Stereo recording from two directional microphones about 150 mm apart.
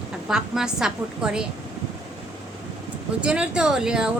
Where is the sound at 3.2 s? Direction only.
5° right (ahead or behind).